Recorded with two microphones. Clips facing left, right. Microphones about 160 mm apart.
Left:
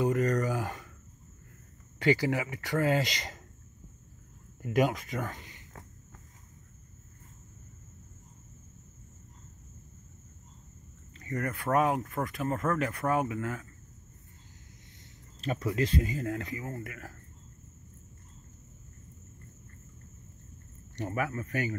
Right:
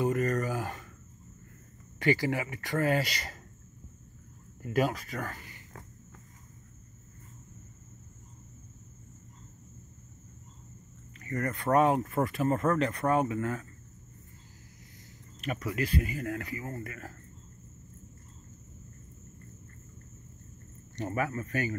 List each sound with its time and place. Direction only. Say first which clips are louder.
0.0 s a sound: left 1 dB; 15° left (ahead or behind)
2.0 s speech: left 1 dB; 15° left (ahead or behind)
4.6 s speech: left 1 dB; 15° left (ahead or behind)
11.2 s speech: right 2 dB; 10° left (ahead or behind)
15.4 s speech: left 3 dB; 25° left (ahead or behind)
21.2 s speech: right 1 dB; 15° left (ahead or behind)